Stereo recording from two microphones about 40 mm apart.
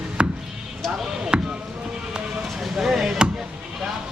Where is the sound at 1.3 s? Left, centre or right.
Right.